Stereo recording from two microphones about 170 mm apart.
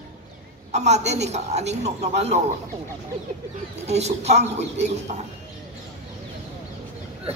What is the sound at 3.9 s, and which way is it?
A woman's voice, 40° right (ahead or behind).